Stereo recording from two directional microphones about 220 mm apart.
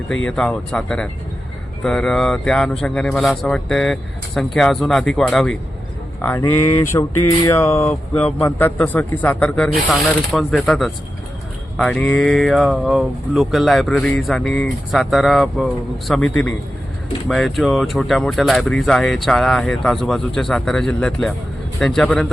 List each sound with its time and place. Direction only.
0.3 s a man's voice: 5° left (ahead or behind)